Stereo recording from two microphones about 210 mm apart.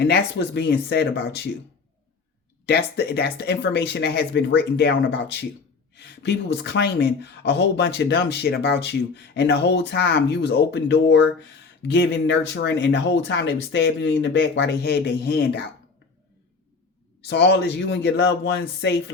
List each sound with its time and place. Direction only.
0.0 s speech: 55° left (ahead or behind)
2.6 s speech: 50° left (ahead or behind)
17.2 s speech: 55° left (ahead or behind)